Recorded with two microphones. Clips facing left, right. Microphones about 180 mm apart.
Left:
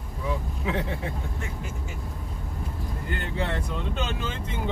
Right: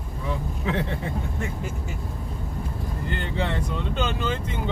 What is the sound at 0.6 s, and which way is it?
Speech, 5° left (ahead or behind).